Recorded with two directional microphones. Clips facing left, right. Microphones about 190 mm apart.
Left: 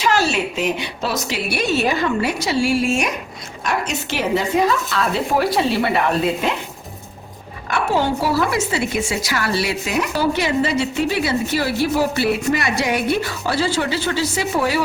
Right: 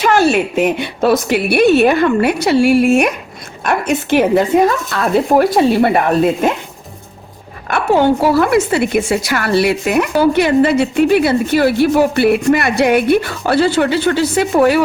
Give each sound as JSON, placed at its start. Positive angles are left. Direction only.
{"t": 0.0, "sound": "speech", "side_deg": -55}
{"t": 7.7, "sound": "speech", "side_deg": -55}